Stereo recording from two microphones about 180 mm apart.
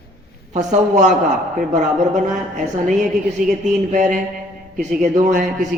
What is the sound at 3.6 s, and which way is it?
Speech, 40° right (ahead or behind).